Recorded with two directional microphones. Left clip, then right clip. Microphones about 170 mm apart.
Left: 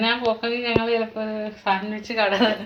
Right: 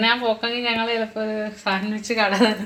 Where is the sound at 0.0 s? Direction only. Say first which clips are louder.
Right 2 dB; 30° right (ahead or behind).